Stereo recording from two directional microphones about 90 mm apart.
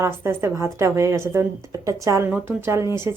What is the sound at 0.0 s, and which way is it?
A woman's voice, 30° right (ahead or behind).